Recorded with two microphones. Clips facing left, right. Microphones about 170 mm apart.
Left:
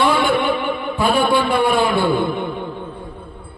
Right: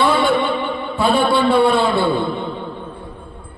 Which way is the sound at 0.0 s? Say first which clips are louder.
Right 1 dB; 10° left (ahead or behind).